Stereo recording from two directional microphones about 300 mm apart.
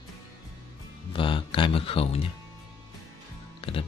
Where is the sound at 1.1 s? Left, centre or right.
Centre.